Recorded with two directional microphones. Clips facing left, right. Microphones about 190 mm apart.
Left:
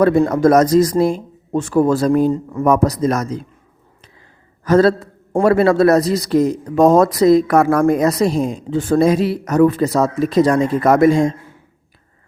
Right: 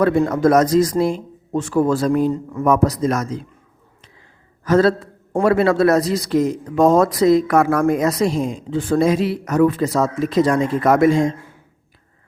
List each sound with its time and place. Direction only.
0.0 s a man's voice: 40° left (ahead or behind)
4.6 s a man's voice: 35° left (ahead or behind)